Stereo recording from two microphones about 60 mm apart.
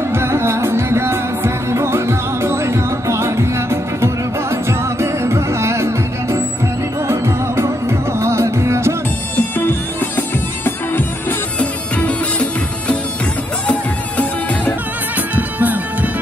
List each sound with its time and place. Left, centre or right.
0.1 s music: right
9.6 s music: left
12.0 s music: centre
15.3 s music: right